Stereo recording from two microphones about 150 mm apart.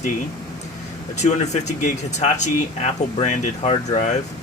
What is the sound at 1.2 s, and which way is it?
Speech, 50° left (ahead or behind).